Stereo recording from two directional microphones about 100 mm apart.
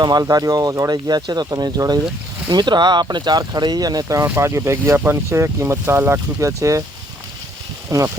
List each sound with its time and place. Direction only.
0.0 s speech: 40° right (ahead or behind)
7.9 s speech: 30° right (ahead or behind)